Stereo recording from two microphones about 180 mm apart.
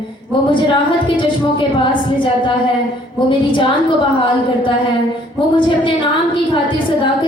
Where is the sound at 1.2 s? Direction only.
25° left (ahead or behind).